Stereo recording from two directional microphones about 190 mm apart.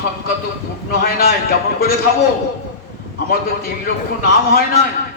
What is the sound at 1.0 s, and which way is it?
Speech, 50° left (ahead or behind).